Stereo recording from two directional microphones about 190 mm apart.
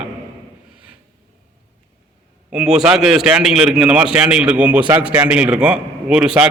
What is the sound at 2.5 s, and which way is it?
A man's voice, 5° right (ahead or behind).